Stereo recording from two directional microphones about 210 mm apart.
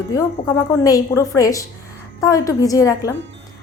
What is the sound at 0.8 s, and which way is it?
A woman's voice, 15° left (ahead or behind).